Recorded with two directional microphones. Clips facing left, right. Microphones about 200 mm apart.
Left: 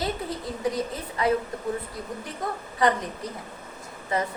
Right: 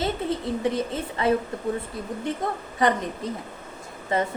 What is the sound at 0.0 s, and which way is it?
A woman's voice, 25° right (ahead or behind).